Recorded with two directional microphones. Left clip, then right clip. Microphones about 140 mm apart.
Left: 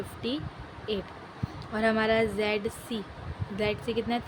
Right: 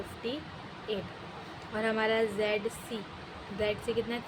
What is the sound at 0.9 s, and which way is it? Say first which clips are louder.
A woman's voice: left 3 dB; 35° left (ahead or behind).